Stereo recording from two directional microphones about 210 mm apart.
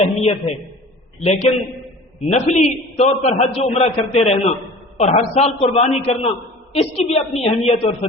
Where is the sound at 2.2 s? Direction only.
35° left (ahead or behind).